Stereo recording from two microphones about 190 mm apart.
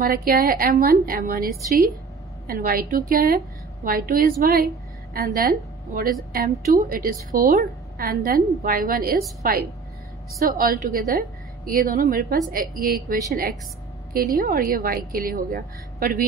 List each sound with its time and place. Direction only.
0.0 s a woman's voice: 50° right (ahead or behind)